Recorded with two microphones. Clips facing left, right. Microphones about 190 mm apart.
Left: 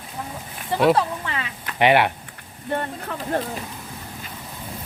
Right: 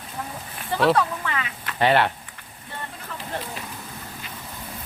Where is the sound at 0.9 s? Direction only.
30° left (ahead or behind).